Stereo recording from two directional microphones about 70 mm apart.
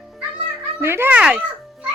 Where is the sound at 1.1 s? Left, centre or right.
Centre.